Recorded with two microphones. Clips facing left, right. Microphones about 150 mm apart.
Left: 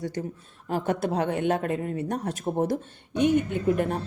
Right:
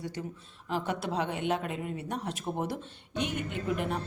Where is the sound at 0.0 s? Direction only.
45° left (ahead or behind).